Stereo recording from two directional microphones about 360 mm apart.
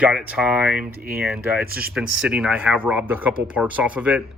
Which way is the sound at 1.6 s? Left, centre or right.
Right.